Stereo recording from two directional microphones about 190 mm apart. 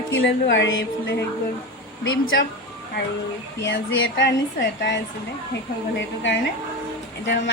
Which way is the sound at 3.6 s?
75° left (ahead or behind).